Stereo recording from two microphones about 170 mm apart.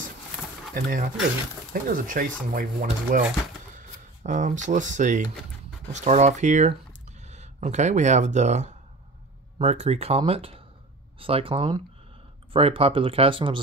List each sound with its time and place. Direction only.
0.7 s speech: 55° right (ahead or behind); by 13.6 s 30° right (ahead or behind)